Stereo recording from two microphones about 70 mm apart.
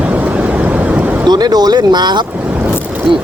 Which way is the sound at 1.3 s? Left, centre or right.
Right.